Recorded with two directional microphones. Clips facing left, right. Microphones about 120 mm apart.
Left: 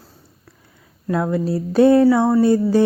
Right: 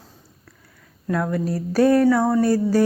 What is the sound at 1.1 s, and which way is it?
Speech, 20° left (ahead or behind).